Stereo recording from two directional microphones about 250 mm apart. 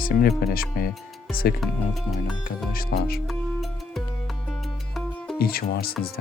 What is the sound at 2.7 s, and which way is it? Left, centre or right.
Speech, left.